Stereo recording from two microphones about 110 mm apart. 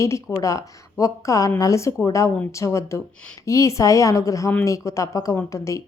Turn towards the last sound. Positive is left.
turn(degrees=25)  # may be behind; listen again after turning